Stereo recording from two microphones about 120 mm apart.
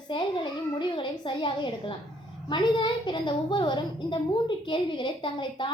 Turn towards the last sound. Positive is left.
turn(degrees=45)  # may be behind; listen again after turning